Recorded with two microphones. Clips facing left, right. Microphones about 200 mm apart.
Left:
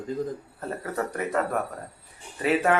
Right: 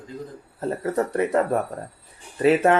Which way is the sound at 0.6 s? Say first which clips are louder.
Right 7 dB; 30° right (ahead or behind).